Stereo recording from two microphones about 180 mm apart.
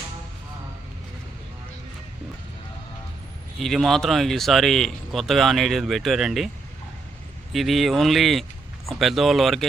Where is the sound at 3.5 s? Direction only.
Centre (ahead or behind).